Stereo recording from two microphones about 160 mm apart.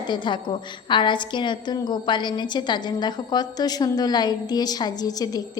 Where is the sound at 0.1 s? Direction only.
30° left (ahead or behind).